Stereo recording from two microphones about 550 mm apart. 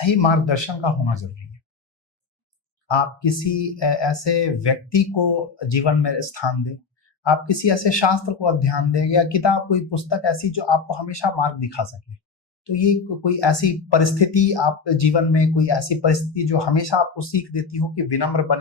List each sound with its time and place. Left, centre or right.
0.0 s speech: left
2.8 s speech: left